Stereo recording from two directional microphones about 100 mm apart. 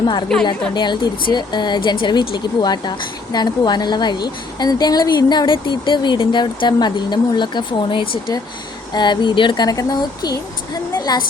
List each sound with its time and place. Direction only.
0.0 s a woman's voice: 50° left (ahead or behind)
9.6 s a woman's voice: 40° left (ahead or behind)